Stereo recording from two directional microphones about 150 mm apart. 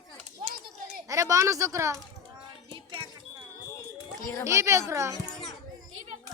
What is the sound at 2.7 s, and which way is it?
Music, 30° right (ahead or behind).